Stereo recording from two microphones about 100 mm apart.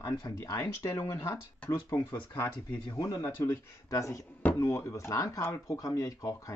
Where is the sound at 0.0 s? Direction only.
35° left (ahead or behind).